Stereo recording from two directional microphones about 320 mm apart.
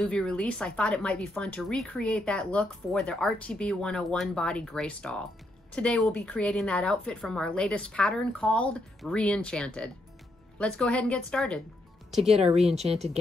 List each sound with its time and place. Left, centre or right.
0.0 s speech: centre
12.7 s speech: centre